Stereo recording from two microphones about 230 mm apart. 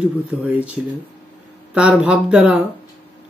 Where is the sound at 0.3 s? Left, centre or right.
Centre.